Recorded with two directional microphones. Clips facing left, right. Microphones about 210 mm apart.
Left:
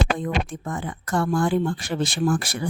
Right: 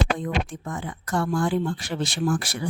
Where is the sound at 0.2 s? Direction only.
50° left (ahead or behind).